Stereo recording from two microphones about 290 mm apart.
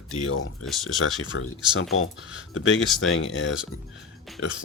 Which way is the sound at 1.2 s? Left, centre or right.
Left.